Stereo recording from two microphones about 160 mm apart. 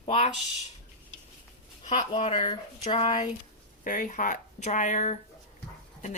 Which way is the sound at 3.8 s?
55° left (ahead or behind).